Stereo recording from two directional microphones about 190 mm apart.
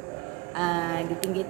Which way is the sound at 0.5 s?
5° left (ahead or behind).